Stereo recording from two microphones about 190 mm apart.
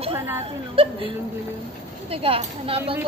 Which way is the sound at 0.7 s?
30° right (ahead or behind).